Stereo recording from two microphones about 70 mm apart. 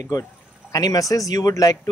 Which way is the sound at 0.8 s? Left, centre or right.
Left.